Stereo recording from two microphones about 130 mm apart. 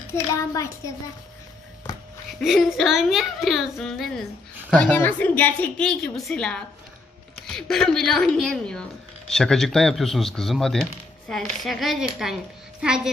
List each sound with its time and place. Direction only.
0.1 s a child's voice: 20° left (ahead or behind)
2.3 s a child's voice: centre (ahead or behind)
4.8 s a woman's voice: 15° left (ahead or behind); by 12.4 s 5° right (ahead or behind)